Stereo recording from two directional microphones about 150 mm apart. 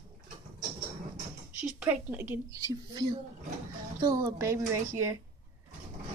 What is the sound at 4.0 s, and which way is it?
Speech, 20° right (ahead or behind).